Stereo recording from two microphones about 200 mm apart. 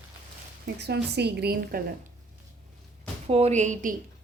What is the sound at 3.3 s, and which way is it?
Speech, 30° right (ahead or behind).